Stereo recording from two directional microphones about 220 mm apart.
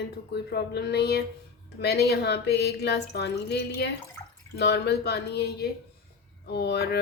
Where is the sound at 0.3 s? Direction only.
50° left (ahead or behind).